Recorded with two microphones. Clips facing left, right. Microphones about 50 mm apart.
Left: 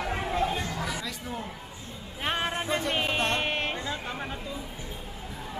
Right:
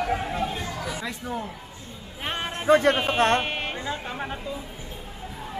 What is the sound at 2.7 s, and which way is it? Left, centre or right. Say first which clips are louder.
Speech: right 16 dB; right.